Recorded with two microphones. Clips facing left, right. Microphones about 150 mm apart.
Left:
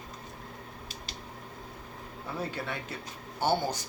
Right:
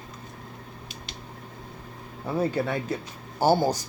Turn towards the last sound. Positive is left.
turn(degrees=-40)  # may be behind; listen again after turning